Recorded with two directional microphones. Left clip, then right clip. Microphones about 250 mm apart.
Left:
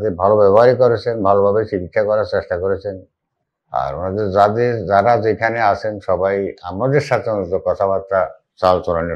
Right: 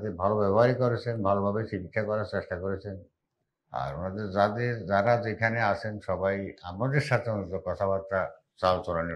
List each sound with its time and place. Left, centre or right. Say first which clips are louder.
0.0 s speech: left 14 dB; left